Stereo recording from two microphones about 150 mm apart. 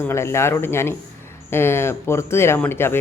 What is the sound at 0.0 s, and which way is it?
Speech, 20° left (ahead or behind).